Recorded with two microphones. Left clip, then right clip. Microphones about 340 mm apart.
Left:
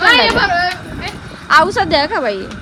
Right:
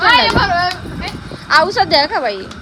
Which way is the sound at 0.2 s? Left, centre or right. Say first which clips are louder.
Left 1 dB; right.